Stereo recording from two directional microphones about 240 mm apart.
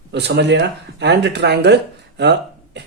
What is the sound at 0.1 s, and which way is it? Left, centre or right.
Speech, right.